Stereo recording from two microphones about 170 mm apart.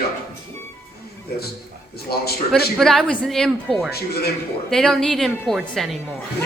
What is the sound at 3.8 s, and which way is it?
Speech, 70° left (ahead or behind).